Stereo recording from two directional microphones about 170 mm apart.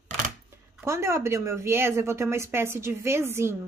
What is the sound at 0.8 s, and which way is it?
Speech, 15° right (ahead or behind).